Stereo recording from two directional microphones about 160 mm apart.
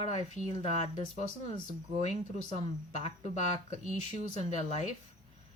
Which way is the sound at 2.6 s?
45° left (ahead or behind).